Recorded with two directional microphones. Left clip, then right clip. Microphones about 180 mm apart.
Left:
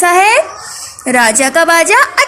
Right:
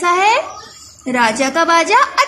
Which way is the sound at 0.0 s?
15° left (ahead or behind).